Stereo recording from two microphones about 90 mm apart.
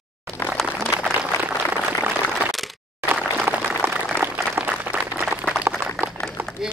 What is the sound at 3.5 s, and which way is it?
Applause, 20° right (ahead or behind).